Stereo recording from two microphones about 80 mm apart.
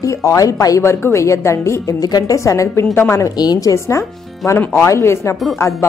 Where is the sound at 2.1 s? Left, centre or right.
Left.